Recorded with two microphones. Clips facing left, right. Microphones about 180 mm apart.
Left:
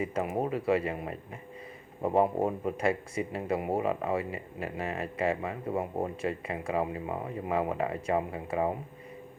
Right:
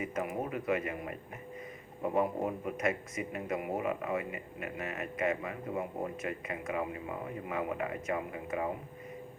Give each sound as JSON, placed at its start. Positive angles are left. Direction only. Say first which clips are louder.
{"t": 0.0, "sound": "speech", "louder": "left 5 dB", "side_deg": 30}